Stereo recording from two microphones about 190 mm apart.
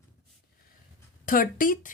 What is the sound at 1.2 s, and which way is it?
Speech, 45° left (ahead or behind).